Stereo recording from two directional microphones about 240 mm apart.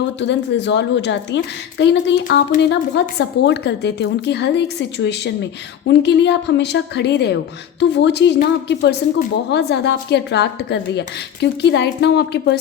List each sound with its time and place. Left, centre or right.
0.2 s speech: left